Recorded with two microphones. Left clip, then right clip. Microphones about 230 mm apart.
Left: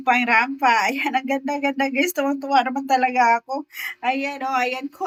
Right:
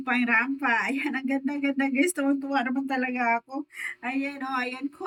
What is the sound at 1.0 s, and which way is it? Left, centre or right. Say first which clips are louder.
Speech: left 7 dB; centre.